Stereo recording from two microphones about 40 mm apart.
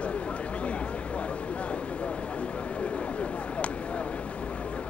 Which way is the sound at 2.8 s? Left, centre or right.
Left.